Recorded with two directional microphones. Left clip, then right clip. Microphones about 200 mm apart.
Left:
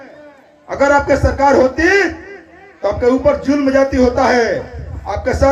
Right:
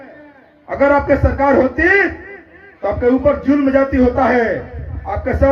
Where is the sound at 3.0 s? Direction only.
25° left (ahead or behind).